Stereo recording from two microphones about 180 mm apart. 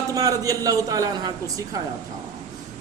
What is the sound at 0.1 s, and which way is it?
A man's voice, 20° right (ahead or behind).